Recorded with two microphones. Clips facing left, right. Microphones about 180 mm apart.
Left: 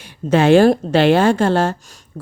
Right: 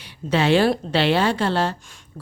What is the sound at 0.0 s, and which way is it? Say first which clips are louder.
Speech: left 6 dB; 50° left (ahead or behind).